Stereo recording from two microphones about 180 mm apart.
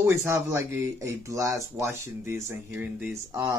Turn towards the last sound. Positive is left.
turn(degrees=-15)  # may be behind; listen again after turning